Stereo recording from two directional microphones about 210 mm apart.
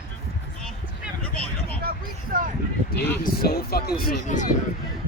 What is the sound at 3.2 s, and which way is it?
Speech, 45° left (ahead or behind).